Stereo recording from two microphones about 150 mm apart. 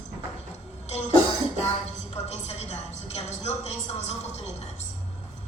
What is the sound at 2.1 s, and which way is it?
A man's voice, 45° left (ahead or behind).